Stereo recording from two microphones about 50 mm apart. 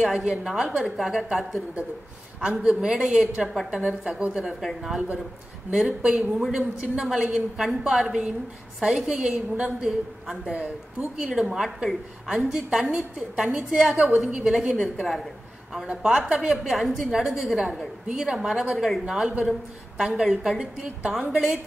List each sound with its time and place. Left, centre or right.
0.0 s a woman's voice: centre
2.4 s a woman's voice: centre
3.0 s a woman's voice: centre
4.0 s a woman's voice: centre
4.3 s a woman's voice: centre
11.4 s a woman's voice: centre
15.9 s a woman's voice: centre
16.3 s a woman's voice: centre
19.2 s a woman's voice: centre
20.0 s a woman's voice: centre